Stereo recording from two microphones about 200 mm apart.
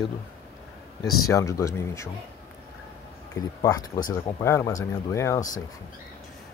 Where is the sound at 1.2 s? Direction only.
15° left (ahead or behind).